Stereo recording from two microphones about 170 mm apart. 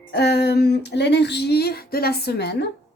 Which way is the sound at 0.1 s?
70° left (ahead or behind).